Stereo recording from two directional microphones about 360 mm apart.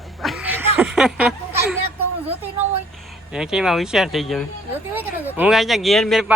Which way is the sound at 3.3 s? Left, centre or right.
Centre.